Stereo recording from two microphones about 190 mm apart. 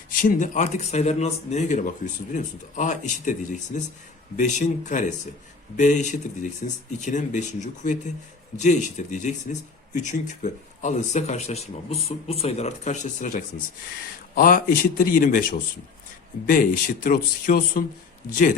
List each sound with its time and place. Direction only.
0.1 s speech: 45° left (ahead or behind)